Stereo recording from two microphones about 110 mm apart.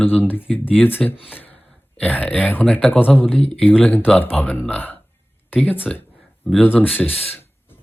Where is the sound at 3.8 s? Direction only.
15° left (ahead or behind).